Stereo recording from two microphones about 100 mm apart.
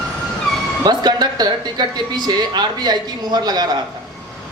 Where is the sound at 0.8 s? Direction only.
45° right (ahead or behind).